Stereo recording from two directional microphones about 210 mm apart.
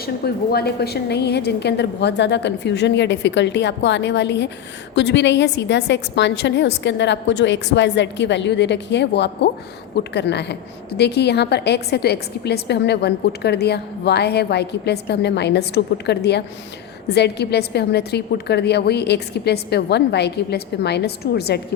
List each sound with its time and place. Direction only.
0.0 s a woman's voice: 50° left (ahead or behind)